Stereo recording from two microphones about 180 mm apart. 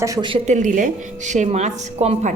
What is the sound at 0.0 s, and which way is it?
A woman's voice, 20° right (ahead or behind).